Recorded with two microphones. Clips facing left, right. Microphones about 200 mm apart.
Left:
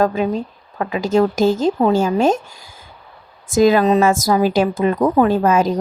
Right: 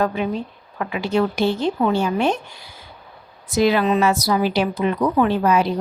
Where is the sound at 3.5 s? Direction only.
45° left (ahead or behind).